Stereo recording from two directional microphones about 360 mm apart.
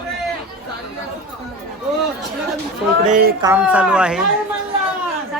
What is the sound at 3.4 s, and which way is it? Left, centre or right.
Speech, centre.